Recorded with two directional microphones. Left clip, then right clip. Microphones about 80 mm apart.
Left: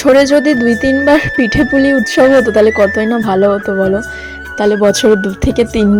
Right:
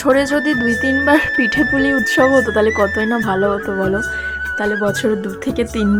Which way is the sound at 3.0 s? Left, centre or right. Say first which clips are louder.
Left 5 dB; left.